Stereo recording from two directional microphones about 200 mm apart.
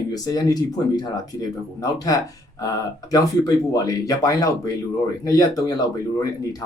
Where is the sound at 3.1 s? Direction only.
20° left (ahead or behind).